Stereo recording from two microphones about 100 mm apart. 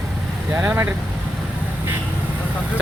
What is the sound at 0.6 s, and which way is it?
Speech, 25° right (ahead or behind).